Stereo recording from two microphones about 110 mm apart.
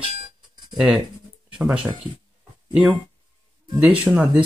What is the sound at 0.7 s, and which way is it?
Speech, 5° right (ahead or behind).